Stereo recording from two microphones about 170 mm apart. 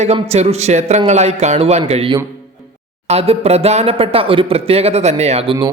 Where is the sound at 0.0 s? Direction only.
40° right (ahead or behind).